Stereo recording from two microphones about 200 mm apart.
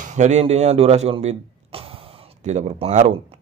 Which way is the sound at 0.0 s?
35° right (ahead or behind).